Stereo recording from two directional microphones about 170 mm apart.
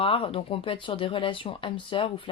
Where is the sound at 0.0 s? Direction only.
30° left (ahead or behind).